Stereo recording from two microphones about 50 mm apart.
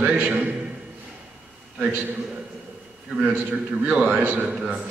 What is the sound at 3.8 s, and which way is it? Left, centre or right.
Speech, right.